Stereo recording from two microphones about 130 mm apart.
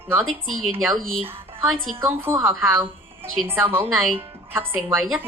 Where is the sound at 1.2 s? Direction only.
15° right (ahead or behind).